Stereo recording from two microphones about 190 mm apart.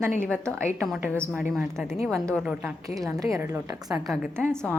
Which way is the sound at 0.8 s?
Centre (ahead or behind).